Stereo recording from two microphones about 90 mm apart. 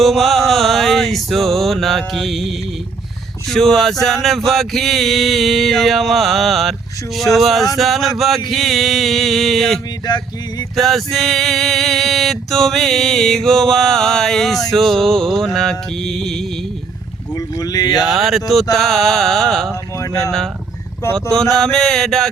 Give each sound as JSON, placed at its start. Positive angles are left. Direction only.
{"t": 0.0, "sound": "mantra", "side_deg": 0}
{"t": 3.5, "sound": "mantra", "side_deg": 5}
{"t": 17.3, "sound": "boat", "side_deg": 40}
{"t": 18.0, "sound": "mantra", "side_deg": 0}
{"t": 20.0, "sound": "speech", "side_deg": 35}
{"t": 21.1, "sound": "a sound", "side_deg": 10}